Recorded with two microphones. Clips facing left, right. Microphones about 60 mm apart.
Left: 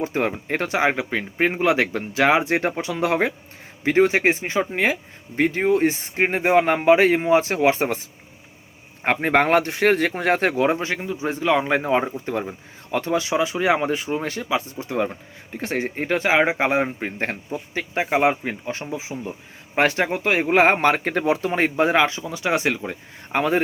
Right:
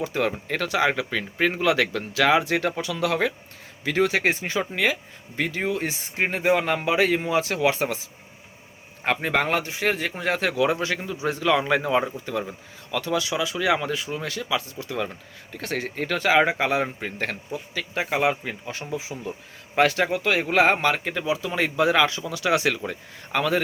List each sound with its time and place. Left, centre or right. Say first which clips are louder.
0.0 s speech: left 2 dB; left
9.0 s speech: left 5 dB; left
21.5 s speech: even; left